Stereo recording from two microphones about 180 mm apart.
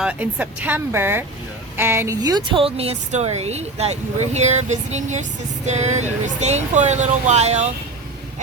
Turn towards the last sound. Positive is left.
turn(degrees=-40)  # may be behind; listen again after turning